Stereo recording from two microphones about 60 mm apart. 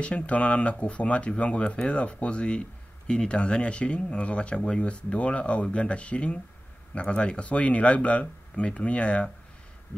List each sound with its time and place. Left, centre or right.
0.0 s speech: left